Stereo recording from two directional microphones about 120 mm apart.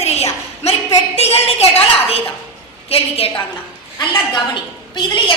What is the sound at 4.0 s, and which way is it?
A woman's voice, 40° left (ahead or behind).